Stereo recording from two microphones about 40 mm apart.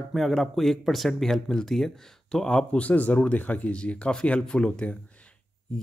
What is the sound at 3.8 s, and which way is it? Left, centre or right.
Speech, left.